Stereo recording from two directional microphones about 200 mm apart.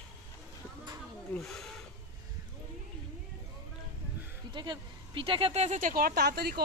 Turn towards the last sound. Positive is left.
turn(degrees=-50)  # may be behind; listen again after turning